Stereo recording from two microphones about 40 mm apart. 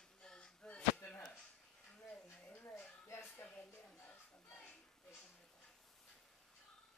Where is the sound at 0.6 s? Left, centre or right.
Left.